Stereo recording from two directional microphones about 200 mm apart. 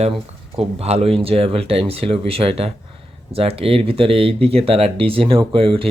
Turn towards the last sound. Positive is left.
turn(degrees=-25)  # may be behind; listen again after turning